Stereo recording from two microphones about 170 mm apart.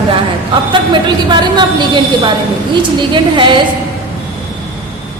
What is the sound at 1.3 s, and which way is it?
A woman's voice, 25° right (ahead or behind).